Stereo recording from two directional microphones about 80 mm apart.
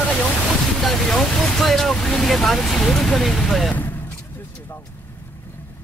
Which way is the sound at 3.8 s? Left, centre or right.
Left.